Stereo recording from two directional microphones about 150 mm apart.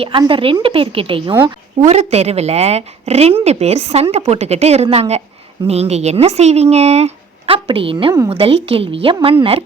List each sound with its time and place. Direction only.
0.0 s a woman's voice: 35° right (ahead or behind)
1.8 s a woman's voice: 45° right (ahead or behind)